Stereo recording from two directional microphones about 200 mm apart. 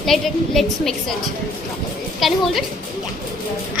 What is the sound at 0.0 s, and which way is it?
A child's voice, centre (ahead or behind).